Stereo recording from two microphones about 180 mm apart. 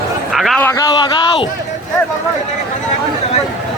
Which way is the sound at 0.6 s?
20° left (ahead or behind).